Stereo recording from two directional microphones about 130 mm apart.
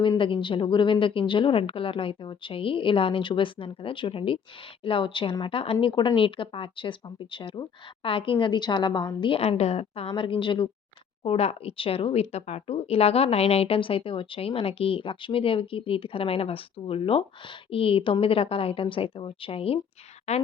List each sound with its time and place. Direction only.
0.2 s speech: 40° left (ahead or behind)
20.3 s speech: 60° left (ahead or behind)